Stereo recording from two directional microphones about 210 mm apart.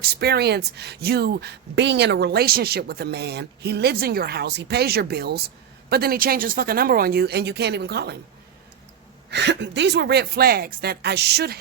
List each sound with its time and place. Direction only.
0.0 s speech: 50° right (ahead or behind)
9.3 s speech: 55° right (ahead or behind)